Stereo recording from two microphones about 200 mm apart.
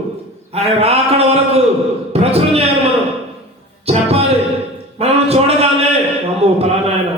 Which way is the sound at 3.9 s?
30° right (ahead or behind).